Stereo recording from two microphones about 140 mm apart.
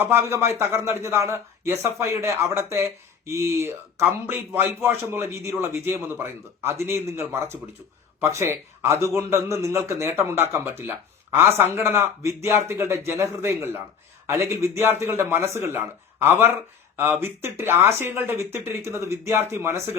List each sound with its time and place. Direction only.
0.0 s a man's voice: 20° right (ahead or behind)
17.0 s speech: 15° right (ahead or behind)